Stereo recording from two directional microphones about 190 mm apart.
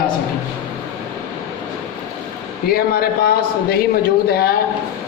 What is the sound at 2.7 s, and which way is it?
A man's voice, 55° left (ahead or behind).